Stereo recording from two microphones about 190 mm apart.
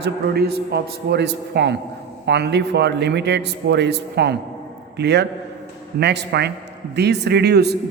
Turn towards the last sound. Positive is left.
turn(degrees=-60)  # may be behind; listen again after turning